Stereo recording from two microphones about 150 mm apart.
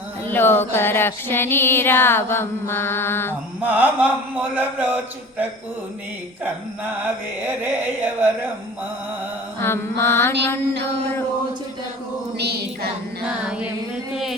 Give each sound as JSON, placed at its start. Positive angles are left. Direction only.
{"t": 0.3, "sound": "a sound", "side_deg": 15}
{"t": 3.6, "sound": "mantra", "side_deg": -10}
{"t": 7.0, "sound": "mantra", "side_deg": -15}
{"t": 9.6, "sound": "a sound", "side_deg": 15}
{"t": 12.4, "sound": "a woman's voice", "side_deg": -90}
{"t": 13.2, "sound": "mantra", "side_deg": -5}